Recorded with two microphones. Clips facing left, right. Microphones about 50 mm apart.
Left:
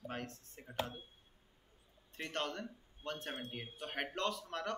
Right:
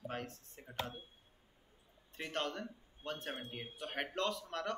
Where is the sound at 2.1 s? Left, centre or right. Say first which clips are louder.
Right 1 dB; centre.